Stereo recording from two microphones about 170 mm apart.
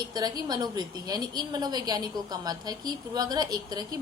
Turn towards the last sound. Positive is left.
turn(degrees=-25)  # may be behind; listen again after turning